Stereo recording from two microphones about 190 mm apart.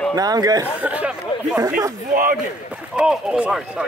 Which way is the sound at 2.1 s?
45° right (ahead or behind).